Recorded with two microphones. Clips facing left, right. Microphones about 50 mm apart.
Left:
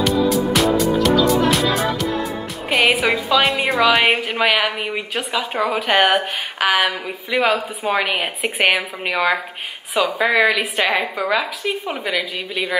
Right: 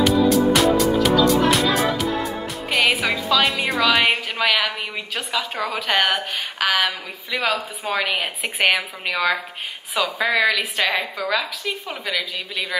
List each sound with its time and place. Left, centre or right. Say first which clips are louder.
0.0 s music: right 1 dB; centre
2.7 s a woman's voice: left 3 dB; centre